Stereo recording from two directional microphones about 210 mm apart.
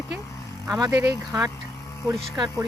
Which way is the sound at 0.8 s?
15° right (ahead or behind).